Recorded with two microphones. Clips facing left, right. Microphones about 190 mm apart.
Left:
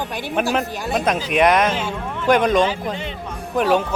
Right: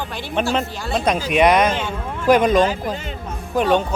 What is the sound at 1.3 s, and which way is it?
Speech, centre (ahead or behind).